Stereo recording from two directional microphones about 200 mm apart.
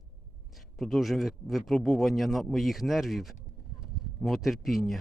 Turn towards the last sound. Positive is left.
turn(degrees=0)  # may be behind; listen again after turning